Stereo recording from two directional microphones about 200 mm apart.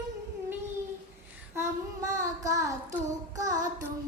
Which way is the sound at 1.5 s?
15° right (ahead or behind).